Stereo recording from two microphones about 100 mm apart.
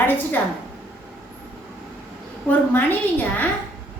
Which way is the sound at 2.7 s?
20° left (ahead or behind).